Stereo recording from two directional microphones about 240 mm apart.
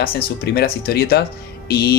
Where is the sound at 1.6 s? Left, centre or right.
Left.